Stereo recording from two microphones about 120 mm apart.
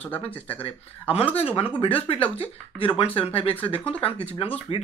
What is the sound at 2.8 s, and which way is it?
A man's voice, 45° left (ahead or behind).